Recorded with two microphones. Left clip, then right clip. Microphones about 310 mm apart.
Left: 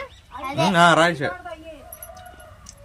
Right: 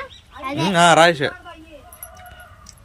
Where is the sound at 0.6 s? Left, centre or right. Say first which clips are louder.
Right 3 dB; centre.